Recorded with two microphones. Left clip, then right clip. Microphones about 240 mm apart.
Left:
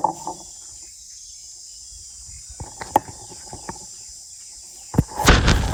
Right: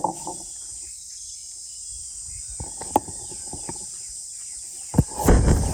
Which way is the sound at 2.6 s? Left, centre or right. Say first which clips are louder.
Left 3 dB; right.